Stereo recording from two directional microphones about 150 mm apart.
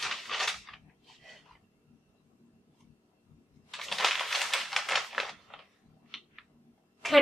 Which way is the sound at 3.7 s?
Centre (ahead or behind).